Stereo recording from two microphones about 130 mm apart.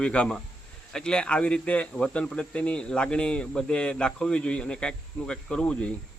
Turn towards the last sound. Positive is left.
turn(degrees=10)  # may be behind; listen again after turning